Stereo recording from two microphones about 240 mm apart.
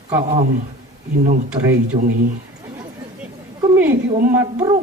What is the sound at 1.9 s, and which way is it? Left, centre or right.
Speech, right.